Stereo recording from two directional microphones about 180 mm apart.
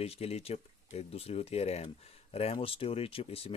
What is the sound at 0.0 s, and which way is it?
Speech, 35° left (ahead or behind).